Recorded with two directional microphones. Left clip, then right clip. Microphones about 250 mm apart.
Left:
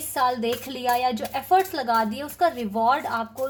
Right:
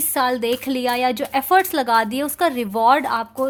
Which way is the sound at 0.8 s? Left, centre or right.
Right.